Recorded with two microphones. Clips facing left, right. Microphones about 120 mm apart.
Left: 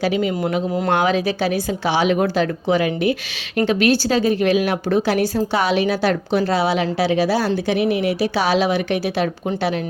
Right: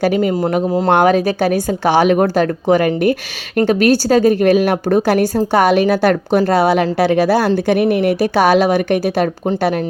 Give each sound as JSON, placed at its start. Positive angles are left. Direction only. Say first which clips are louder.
{"t": 0.0, "sound": "a woman's voice", "louder": "right 5 dB", "side_deg": -50}